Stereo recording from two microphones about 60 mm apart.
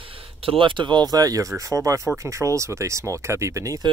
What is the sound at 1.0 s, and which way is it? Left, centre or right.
Speech, right.